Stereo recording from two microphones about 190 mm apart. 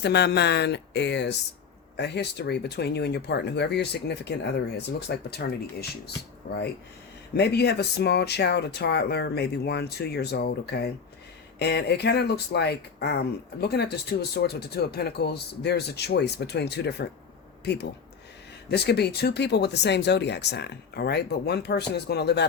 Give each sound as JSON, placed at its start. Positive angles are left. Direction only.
{"t": 0.0, "sound": "speech", "side_deg": 60}